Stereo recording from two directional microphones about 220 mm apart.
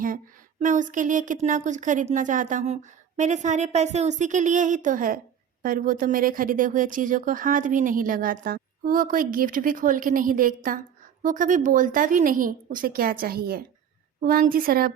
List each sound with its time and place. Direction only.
0.6 s speech: 35° right (ahead or behind)